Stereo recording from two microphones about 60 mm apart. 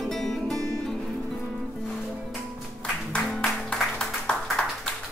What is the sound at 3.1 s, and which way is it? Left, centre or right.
Music, centre.